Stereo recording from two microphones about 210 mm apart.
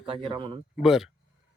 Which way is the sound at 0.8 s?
Centre (ahead or behind).